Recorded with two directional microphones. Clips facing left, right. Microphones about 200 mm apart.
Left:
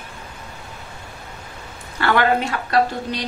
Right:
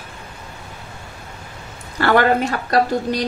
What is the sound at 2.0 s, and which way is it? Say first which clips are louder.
A woman's voice: right 3 dB; 40° right (ahead or behind).